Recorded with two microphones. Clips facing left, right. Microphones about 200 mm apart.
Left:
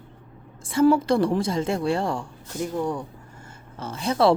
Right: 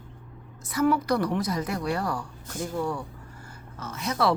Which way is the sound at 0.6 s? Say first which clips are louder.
Left 5 dB; 30° left (ahead or behind).